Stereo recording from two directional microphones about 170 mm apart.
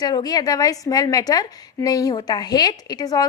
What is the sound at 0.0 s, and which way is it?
A woman's voice, 25° left (ahead or behind).